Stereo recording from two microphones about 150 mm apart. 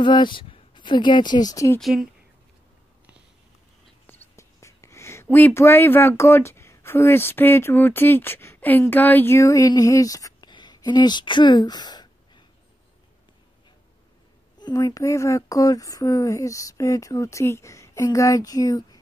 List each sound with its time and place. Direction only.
0.0 s speech: 30° left (ahead or behind)
4.1 s speech: 20° left (ahead or behind)
14.6 s speech: 25° left (ahead or behind)